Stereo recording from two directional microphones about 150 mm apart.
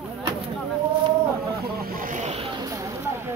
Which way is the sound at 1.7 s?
75° right (ahead or behind).